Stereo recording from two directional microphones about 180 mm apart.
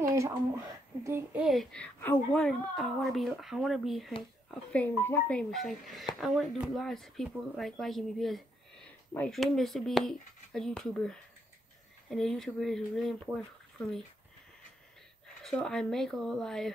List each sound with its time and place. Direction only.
0.0 s a sound: 15° right (ahead or behind)
1.0 s a woman's voice: 15° right (ahead or behind)
1.4 s speech: centre (ahead or behind)
15.4 s speech: 5° left (ahead or behind)